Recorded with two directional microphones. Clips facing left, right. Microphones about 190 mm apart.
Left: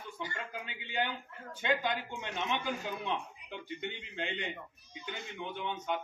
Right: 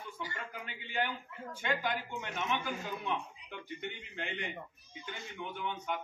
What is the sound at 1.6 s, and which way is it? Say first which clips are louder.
Speech: left 3 dB; 20° left (ahead or behind).